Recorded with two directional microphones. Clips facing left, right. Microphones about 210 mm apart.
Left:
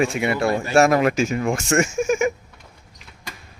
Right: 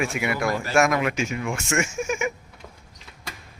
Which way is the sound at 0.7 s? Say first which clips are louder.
Left 5 dB; 35° left (ahead or behind).